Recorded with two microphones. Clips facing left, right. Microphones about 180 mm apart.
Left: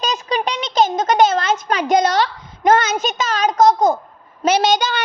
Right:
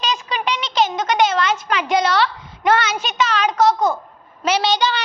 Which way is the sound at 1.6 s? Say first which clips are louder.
Left 3 dB; 40° left (ahead or behind).